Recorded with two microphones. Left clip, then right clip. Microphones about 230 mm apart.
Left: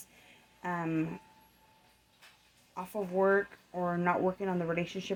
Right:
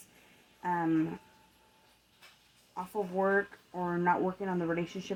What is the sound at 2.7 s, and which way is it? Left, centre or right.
Speech, left.